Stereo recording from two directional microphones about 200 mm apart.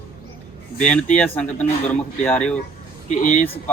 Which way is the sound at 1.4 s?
5° left (ahead or behind).